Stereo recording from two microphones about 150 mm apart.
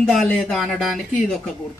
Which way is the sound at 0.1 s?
Centre (ahead or behind).